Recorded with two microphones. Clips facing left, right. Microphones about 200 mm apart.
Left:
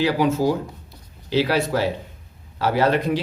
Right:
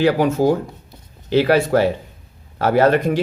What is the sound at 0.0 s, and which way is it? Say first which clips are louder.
Speech: right 4 dB; 50° right (ahead or behind).